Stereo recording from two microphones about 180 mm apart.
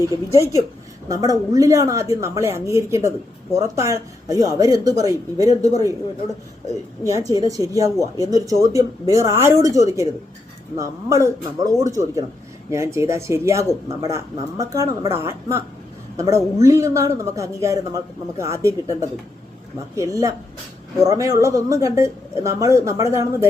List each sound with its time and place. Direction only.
1.0 s a man's voice: 20° right (ahead or behind)
7.0 s a man's voice: 20° right (ahead or behind)